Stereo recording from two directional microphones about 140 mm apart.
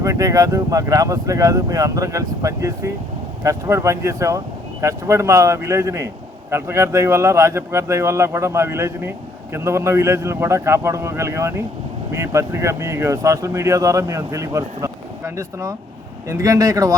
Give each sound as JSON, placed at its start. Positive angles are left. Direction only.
{"t": 0.0, "sound": "speech", "side_deg": -25}